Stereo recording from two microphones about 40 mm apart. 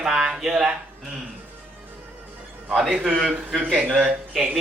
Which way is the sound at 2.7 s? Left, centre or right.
Centre.